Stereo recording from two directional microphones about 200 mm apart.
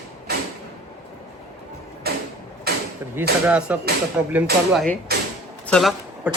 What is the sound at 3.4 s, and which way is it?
Speech, 5° right (ahead or behind).